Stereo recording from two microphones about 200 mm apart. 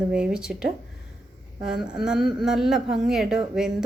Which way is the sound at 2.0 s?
Centre (ahead or behind).